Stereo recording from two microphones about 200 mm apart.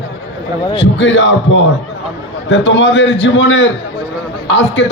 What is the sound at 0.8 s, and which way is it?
A man's voice, 65° left (ahead or behind).